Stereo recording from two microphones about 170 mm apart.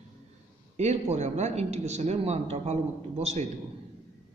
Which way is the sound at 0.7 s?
40° right (ahead or behind).